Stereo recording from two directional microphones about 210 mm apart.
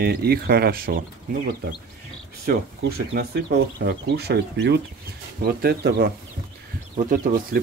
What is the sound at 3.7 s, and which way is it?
Speech, 50° right (ahead or behind).